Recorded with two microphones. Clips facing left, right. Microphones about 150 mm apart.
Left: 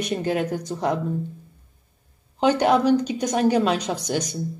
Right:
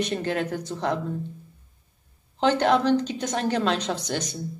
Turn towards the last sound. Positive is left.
turn(degrees=10)  # may be behind; listen again after turning